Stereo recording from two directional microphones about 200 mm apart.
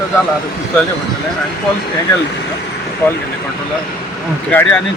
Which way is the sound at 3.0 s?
10° left (ahead or behind).